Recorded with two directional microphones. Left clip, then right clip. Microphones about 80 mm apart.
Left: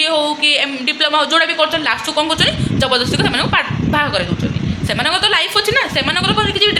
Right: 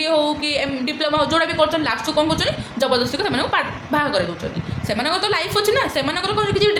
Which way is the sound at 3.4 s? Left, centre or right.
Right.